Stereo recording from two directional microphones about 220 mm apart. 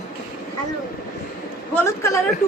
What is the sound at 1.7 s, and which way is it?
Speech, 10° left (ahead or behind).